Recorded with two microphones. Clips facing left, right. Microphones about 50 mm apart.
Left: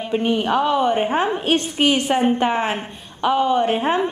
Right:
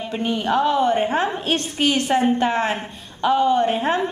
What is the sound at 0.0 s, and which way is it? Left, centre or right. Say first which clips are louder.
A woman's voice: left 3 dB; centre.